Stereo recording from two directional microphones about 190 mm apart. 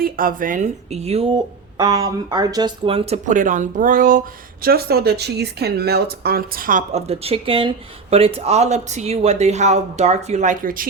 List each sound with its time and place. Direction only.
0.0 s a woman's voice: 50° right (ahead or behind)